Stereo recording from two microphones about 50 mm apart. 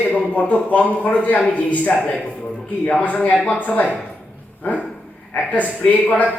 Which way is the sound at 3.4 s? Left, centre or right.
Left.